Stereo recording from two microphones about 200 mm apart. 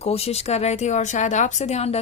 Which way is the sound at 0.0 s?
30° left (ahead or behind).